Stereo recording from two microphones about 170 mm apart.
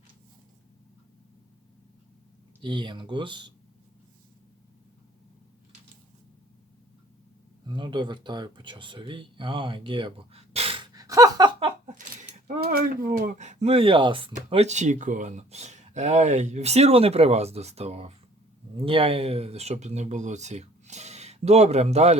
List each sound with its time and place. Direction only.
2.6 s speech: 25° right (ahead or behind)
7.7 s speech: 25° right (ahead or behind)
10.9 s a sound: 20° right (ahead or behind)
11.6 s a sound: 45° right (ahead or behind)
12.5 s speech: 65° right (ahead or behind); by 14.3 s 30° right (ahead or behind)
14.3 s speech: 40° right (ahead or behind)